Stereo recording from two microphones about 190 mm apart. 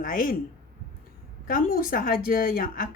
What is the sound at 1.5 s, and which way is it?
A woman's voice, 45° left (ahead or behind).